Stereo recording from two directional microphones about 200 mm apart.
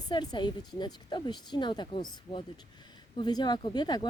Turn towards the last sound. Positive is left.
turn(degrees=20)  # may be behind; listen again after turning